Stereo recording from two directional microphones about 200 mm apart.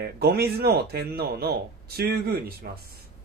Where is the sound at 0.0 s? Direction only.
55° right (ahead or behind).